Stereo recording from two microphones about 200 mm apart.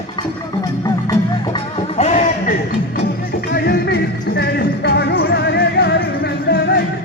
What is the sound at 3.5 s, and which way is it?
Music, 55° left (ahead or behind).